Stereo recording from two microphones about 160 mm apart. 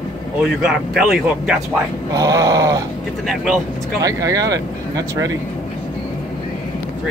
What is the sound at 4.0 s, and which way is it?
Speech, 20° right (ahead or behind).